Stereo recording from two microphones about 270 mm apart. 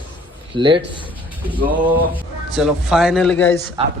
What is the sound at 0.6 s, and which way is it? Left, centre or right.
Speech, centre.